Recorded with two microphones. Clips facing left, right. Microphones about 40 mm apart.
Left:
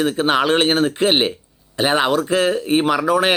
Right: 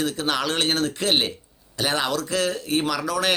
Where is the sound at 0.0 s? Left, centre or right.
Left.